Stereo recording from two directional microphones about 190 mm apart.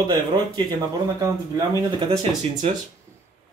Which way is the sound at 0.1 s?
20° right (ahead or behind).